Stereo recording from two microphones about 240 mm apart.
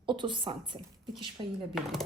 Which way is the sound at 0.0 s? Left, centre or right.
Centre.